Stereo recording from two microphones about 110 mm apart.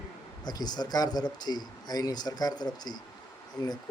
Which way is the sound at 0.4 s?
40° left (ahead or behind).